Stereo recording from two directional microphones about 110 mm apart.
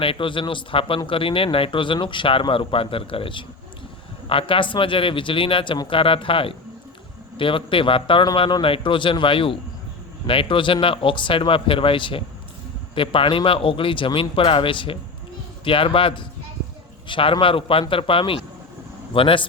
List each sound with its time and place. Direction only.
0.0 s a man's voice: 50° left (ahead or behind)